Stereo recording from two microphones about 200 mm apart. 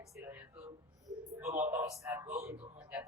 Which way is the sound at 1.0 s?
15° right (ahead or behind).